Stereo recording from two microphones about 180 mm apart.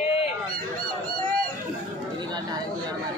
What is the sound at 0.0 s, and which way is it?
Honk, 35° left (ahead or behind).